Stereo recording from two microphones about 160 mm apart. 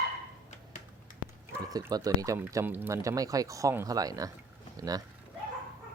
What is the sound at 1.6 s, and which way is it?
Speech, 25° right (ahead or behind).